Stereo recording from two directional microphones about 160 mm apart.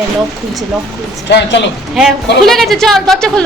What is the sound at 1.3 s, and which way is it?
Speech, 90° left.